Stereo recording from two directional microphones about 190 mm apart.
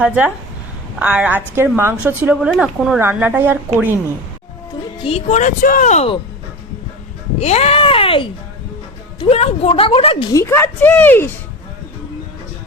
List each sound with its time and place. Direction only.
0.9 s a woman's voice: 10° right (ahead or behind)
4.9 s speech: 30° left (ahead or behind)
7.3 s speech: 35° left (ahead or behind)
10.3 s a woman's voice: 10° left (ahead or behind)